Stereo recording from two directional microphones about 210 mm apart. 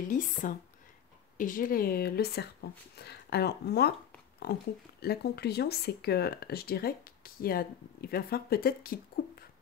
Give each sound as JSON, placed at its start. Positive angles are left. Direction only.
{"t": 0.1, "sound": "speech", "side_deg": 40}